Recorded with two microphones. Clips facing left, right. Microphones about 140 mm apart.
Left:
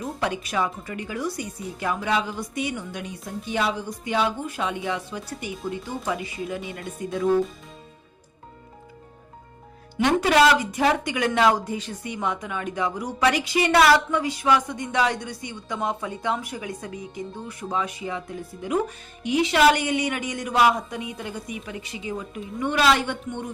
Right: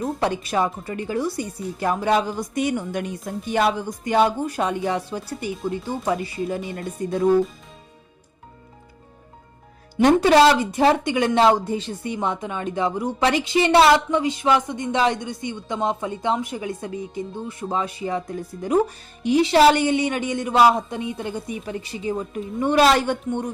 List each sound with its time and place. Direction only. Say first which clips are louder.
0.0 s speech: right 4 dB; 30° right (ahead or behind)
10.0 s speech: right 4 dB; 35° right (ahead or behind)